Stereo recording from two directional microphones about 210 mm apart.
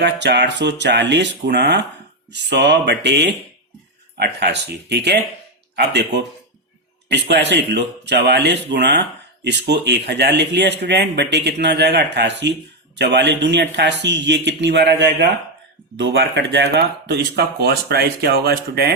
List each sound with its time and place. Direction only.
0.0 s speech: 55° right (ahead or behind)